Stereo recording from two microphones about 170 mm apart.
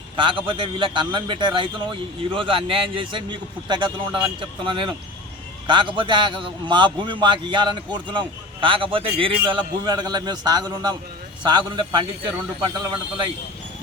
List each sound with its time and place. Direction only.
0.2 s a man's voice: 30° right (ahead or behind)